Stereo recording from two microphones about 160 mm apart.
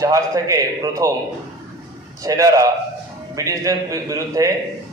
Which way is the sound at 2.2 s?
20° right (ahead or behind).